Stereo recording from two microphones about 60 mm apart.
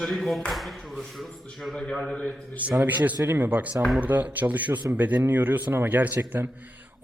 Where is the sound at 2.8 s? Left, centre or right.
Right.